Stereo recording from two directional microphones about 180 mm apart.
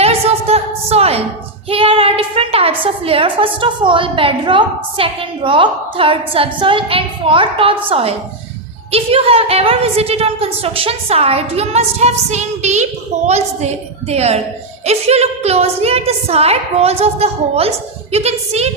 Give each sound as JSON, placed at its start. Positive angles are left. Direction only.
{"t": 0.0, "sound": "a woman's voice", "side_deg": -35}